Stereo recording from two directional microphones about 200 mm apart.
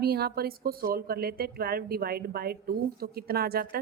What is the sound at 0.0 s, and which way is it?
A woman's voice, 50° right (ahead or behind).